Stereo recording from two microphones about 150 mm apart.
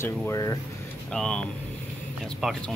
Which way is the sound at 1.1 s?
5° left (ahead or behind).